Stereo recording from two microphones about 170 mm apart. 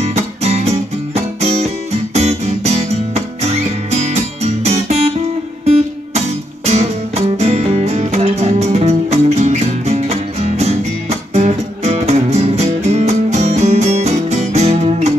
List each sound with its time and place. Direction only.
0.0 s music: 40° right (ahead or behind)